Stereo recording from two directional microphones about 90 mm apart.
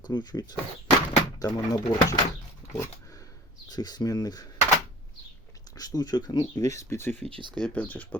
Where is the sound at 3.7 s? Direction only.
50° left (ahead or behind).